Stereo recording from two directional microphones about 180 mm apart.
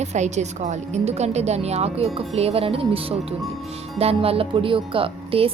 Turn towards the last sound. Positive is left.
turn(degrees=-30)  # may be behind; listen again after turning